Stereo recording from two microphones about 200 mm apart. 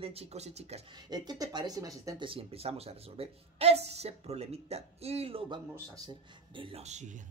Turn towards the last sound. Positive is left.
turn(degrees=-35)  # may be behind; listen again after turning